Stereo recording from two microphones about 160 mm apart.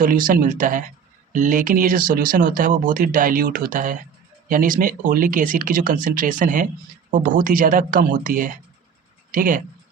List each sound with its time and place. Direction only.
0.0 s speech: 60° right (ahead or behind)